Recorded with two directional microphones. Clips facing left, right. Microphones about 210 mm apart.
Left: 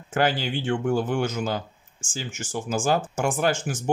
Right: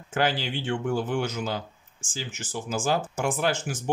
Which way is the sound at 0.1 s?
50° left (ahead or behind).